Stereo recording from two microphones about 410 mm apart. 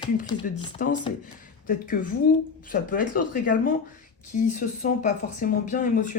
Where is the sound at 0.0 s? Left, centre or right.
Centre.